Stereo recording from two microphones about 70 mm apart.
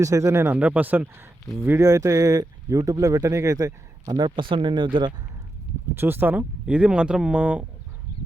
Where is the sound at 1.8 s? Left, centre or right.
Right.